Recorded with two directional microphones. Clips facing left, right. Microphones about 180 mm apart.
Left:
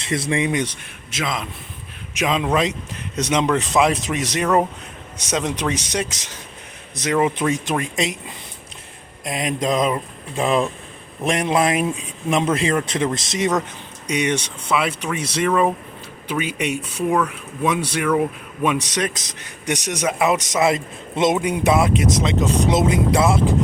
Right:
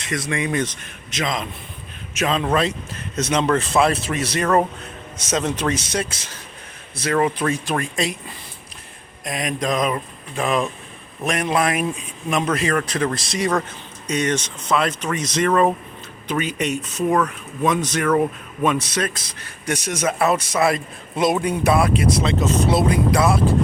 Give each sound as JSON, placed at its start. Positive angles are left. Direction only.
{"t": 0.0, "sound": "speech", "side_deg": 30}
{"t": 1.1, "sound": "a man's voice", "side_deg": 5}
{"t": 9.2, "sound": "a man's voice", "side_deg": 25}